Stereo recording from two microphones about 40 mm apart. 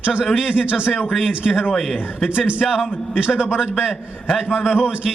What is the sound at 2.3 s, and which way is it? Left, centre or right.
Speech, right.